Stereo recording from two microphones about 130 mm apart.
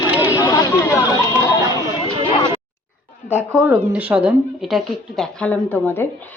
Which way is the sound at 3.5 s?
5° right (ahead or behind).